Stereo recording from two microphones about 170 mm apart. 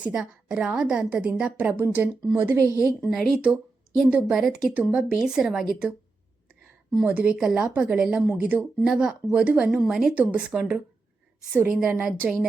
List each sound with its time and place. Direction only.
0.0 s speech: 5° right (ahead or behind)
3.0 s speech: centre (ahead or behind)
7.0 s speech: 10° right (ahead or behind)